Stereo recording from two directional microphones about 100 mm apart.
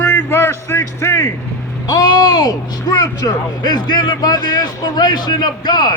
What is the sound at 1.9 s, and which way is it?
Speech, 40° left (ahead or behind).